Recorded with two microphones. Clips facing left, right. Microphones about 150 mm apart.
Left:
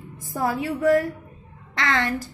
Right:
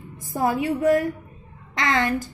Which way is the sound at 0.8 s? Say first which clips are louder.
Left 2 dB; 20° right (ahead or behind).